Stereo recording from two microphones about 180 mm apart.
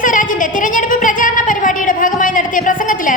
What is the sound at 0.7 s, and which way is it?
Music, 45° left (ahead or behind).